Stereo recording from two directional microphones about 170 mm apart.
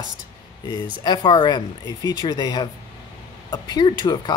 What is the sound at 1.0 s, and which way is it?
Speech, 30° left (ahead or behind).